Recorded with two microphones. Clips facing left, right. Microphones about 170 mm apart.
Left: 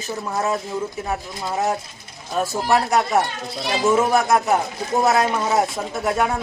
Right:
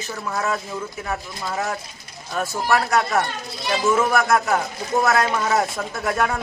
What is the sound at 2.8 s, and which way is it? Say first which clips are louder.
Speech: left 1 dB; 20° left (ahead or behind).